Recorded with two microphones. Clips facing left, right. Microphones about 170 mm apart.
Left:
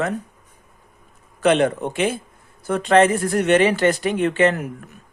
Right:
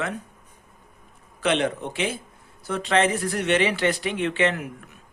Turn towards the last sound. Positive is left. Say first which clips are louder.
# left 5 dB
turn(degrees=45)  # may be behind; listen again after turning